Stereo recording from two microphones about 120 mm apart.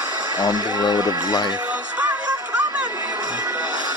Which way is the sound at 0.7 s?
35° left (ahead or behind).